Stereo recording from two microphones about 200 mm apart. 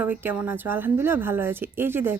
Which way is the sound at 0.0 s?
10° right (ahead or behind).